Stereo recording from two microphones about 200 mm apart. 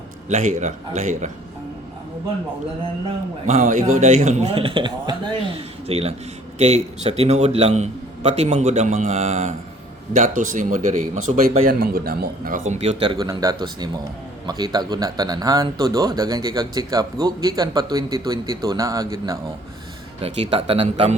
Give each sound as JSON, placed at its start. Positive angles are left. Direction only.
{"t": 0.3, "sound": "a man's voice", "side_deg": -35}
{"t": 3.4, "sound": "a man's voice", "side_deg": -35}
{"t": 12.6, "sound": "speech", "side_deg": -35}
{"t": 20.2, "sound": "a man's voice", "side_deg": -30}